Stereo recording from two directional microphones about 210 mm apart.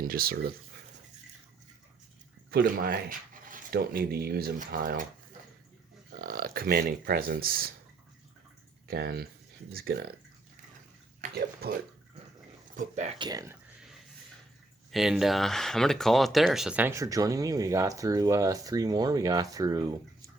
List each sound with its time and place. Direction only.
0.0 s speech: 45° right (ahead or behind)
2.5 s speech: 45° right (ahead or behind)
6.1 s speech: 40° right (ahead or behind)
8.9 s speech: 50° right (ahead or behind)
11.6 s speech: 45° right (ahead or behind)
12.7 s speech: 35° right (ahead or behind)
13.1 s speech: 20° right (ahead or behind)
14.8 s speech: centre (ahead or behind); by 20.0 s 20° right (ahead or behind)